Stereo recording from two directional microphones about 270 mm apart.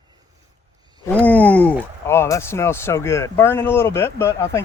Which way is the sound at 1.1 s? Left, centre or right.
Centre.